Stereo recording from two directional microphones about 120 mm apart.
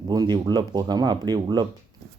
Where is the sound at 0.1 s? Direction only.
35° right (ahead or behind).